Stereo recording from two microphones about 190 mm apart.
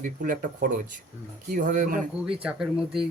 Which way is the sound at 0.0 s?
45° right (ahead or behind).